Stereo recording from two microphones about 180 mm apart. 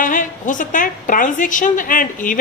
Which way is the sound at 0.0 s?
45° left (ahead or behind).